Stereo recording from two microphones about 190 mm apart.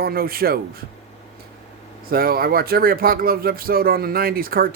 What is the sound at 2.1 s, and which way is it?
Speech, 50° right (ahead or behind).